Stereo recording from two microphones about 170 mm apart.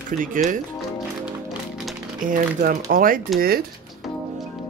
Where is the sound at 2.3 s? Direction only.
55° right (ahead or behind).